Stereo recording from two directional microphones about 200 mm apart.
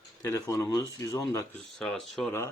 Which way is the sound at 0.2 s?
15° left (ahead or behind).